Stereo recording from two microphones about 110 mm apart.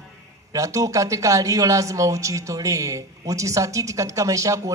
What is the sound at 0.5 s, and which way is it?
A man's voice, 30° right (ahead or behind).